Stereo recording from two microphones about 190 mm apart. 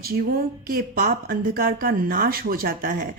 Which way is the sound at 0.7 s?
50° right (ahead or behind).